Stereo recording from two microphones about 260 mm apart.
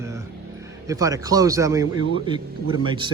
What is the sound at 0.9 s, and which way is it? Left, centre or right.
A man's voice, centre.